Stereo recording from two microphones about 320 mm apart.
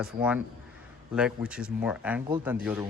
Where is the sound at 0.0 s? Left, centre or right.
Centre.